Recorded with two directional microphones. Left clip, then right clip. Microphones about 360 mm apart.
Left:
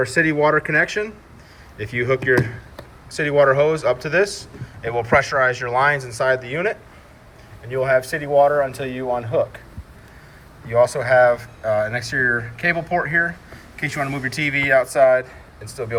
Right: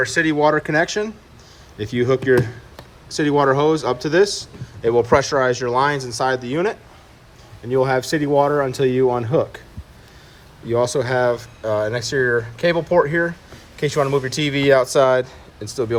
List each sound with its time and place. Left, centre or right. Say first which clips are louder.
0.1 s speech: even; centre; by 8.9 s right
10.7 s speech: left 3 dB; centre